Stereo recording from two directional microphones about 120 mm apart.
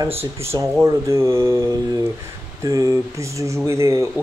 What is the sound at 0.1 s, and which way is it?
Speech, 20° right (ahead or behind).